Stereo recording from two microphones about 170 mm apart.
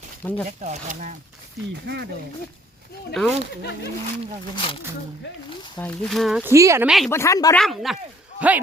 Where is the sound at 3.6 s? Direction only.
75° left (ahead or behind).